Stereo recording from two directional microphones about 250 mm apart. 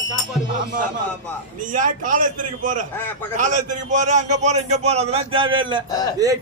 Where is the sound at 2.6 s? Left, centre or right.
Right.